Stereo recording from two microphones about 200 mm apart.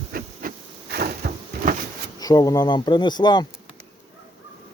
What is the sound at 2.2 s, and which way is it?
Speech, 20° left (ahead or behind).